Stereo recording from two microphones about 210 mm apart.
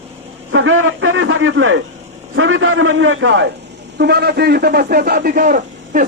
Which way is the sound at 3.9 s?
50° right (ahead or behind).